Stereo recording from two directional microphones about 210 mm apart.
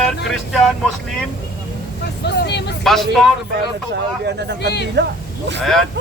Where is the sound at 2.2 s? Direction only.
50° left (ahead or behind).